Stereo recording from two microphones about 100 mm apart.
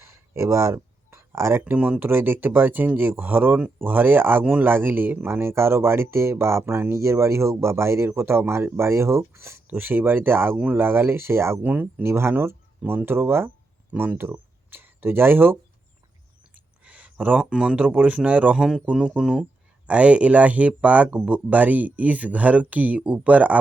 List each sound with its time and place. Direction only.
0.0 s speech: 25° right (ahead or behind)
16.8 s a sound: 15° right (ahead or behind)
17.4 s speech: 10° right (ahead or behind)